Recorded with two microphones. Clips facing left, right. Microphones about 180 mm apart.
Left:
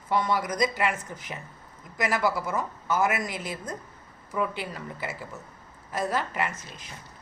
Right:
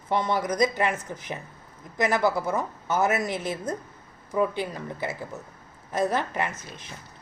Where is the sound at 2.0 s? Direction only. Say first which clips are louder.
Right 3 dB; 20° right (ahead or behind).